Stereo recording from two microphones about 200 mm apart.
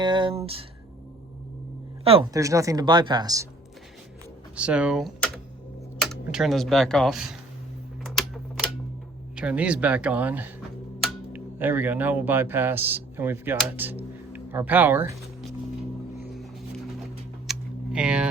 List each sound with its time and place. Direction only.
0.0 s speech: 25° right (ahead or behind)
2.3 s speech: 15° right (ahead or behind)
4.5 s speech: 5° right (ahead or behind)
8.0 s typewriter: centre (ahead or behind)
9.3 s speech: 5° right (ahead or behind)
16.3 s music: centre (ahead or behind)
17.4 s a sound: 5° right (ahead or behind)